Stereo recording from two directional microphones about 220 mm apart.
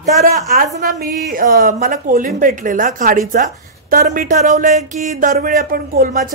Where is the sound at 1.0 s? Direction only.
40° right (ahead or behind).